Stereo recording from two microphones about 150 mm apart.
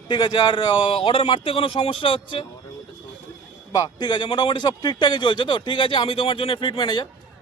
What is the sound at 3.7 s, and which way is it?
Speech, 25° left (ahead or behind).